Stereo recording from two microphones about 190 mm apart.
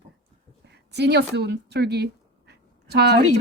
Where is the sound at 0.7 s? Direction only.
60° right (ahead or behind).